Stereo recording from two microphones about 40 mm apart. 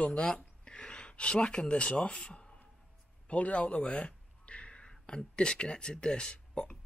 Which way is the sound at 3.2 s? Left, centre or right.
Left.